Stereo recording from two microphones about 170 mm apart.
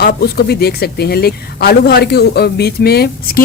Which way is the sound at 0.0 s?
70° left (ahead or behind).